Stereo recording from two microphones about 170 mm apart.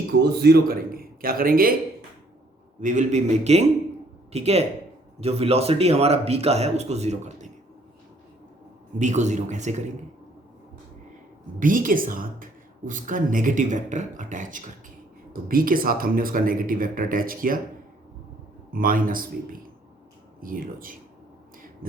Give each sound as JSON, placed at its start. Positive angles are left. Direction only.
{"t": 0.1, "sound": "speech", "side_deg": -70}
{"t": 2.8, "sound": "speech", "side_deg": -45}
{"t": 9.0, "sound": "speech", "side_deg": -45}
{"t": 11.6, "sound": "speech", "side_deg": -50}
{"t": 18.7, "sound": "speech", "side_deg": -55}